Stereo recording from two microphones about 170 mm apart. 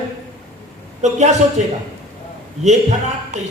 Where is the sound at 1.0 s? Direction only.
45° right (ahead or behind).